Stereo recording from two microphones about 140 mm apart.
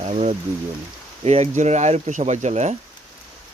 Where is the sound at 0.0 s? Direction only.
50° right (ahead or behind).